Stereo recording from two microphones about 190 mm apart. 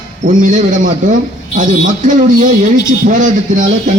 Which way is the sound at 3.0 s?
40° right (ahead or behind).